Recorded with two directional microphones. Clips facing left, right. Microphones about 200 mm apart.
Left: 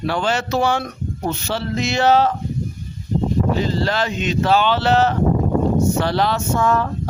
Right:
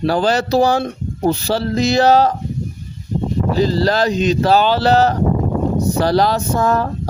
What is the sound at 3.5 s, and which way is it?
Speech, 35° right (ahead or behind).